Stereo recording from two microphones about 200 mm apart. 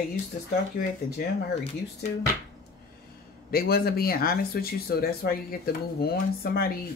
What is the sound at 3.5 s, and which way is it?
Speech, 50° left (ahead or behind).